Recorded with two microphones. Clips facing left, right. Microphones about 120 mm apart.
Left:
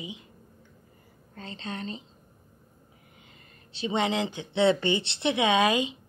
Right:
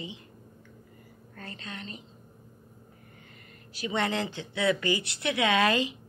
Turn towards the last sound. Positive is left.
turn(degrees=15)  # may be behind; listen again after turning